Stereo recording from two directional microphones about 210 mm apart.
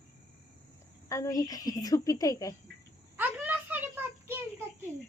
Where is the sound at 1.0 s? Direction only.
15° left (ahead or behind).